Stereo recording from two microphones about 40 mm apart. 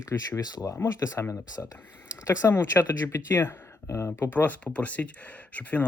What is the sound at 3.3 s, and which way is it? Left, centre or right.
Speech, left.